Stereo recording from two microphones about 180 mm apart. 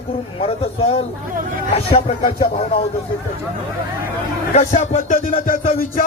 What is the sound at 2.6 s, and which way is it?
Music, 35° left (ahead or behind).